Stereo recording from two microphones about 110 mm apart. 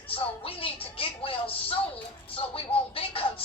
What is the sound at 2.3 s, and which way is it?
Music, 55° left (ahead or behind).